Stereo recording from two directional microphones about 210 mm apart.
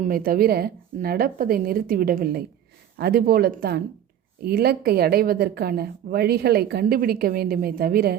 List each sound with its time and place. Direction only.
0.0 s a woman's voice: 45° right (ahead or behind)